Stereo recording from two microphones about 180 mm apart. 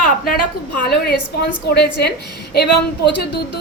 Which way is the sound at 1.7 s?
65° left (ahead or behind).